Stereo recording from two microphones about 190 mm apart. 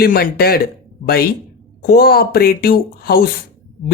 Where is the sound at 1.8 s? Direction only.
55° left (ahead or behind).